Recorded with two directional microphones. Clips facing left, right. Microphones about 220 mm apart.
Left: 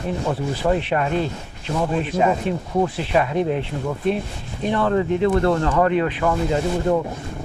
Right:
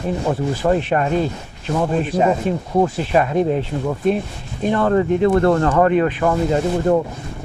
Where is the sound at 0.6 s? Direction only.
45° right (ahead or behind).